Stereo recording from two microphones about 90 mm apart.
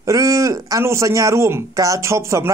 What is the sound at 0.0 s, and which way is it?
Speech, 40° right (ahead or behind).